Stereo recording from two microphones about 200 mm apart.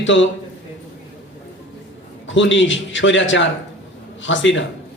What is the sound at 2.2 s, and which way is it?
A man's voice, 65° left (ahead or behind).